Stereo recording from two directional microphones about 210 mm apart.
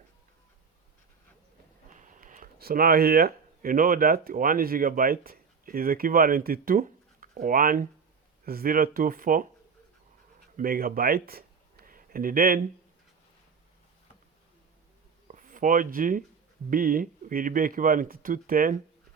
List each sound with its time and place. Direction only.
1.9 s speech: 35° right (ahead or behind)
10.6 s speech: 45° right (ahead or behind)
15.3 s speech: 40° right (ahead or behind)